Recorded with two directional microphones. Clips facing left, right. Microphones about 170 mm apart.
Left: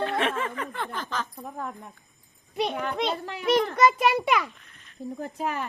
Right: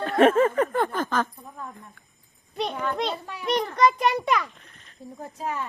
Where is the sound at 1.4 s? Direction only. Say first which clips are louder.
Left 5 dB; 80° left.